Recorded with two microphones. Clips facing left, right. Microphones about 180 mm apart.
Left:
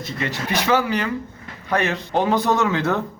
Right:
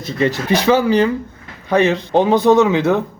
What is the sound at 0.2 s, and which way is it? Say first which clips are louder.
Speech: right 9 dB; 30° right (ahead or behind).